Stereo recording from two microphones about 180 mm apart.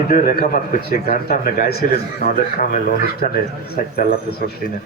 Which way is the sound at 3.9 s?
60° left (ahead or behind).